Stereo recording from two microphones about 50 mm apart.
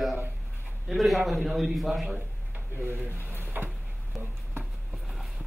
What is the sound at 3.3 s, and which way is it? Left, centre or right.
Drawer open or close, right.